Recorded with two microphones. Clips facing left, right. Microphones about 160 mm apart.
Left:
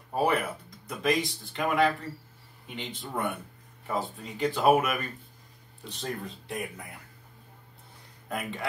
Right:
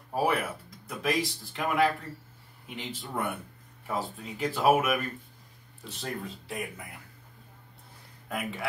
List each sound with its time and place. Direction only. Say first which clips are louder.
0.1 s speech: left 1 dB; 5° right (ahead or behind)
8.3 s speech: even; 5° right (ahead or behind)